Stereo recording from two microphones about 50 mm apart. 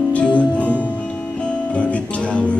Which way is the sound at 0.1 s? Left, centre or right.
Left.